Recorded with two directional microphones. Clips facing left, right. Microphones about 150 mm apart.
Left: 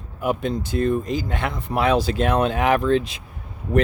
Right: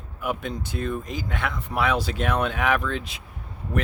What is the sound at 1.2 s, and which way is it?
Speech, 35° left (ahead or behind).